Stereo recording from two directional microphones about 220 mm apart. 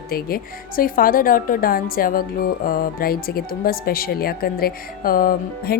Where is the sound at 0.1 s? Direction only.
40° left (ahead or behind).